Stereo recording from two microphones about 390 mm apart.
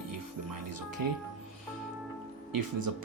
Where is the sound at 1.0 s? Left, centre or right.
Right.